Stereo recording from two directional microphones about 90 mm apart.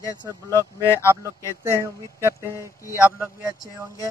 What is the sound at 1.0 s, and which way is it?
Speech, 30° right (ahead or behind).